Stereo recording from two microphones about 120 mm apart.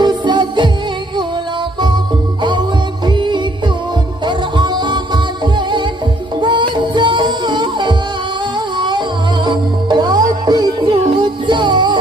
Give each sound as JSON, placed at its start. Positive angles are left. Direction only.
{"t": 0.0, "sound": "music", "side_deg": -35}
{"t": 3.1, "sound": "music", "side_deg": -40}